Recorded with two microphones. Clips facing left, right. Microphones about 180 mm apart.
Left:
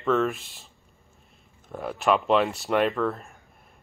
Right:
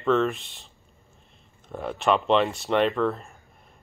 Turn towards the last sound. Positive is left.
turn(degrees=0)  # may be behind; listen again after turning